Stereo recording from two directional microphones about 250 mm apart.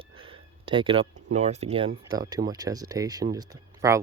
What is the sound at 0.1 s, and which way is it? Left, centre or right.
Speech, right.